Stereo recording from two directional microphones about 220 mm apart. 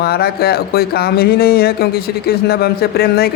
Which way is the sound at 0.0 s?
45° left (ahead or behind).